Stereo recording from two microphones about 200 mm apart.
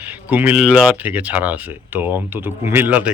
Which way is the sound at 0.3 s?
5° right (ahead or behind).